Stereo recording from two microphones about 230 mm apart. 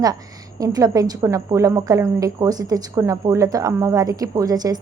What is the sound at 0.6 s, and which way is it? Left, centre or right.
A woman's voice, centre.